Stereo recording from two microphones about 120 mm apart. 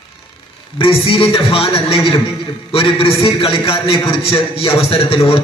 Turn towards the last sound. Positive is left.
turn(degrees=50)  # may be behind; listen again after turning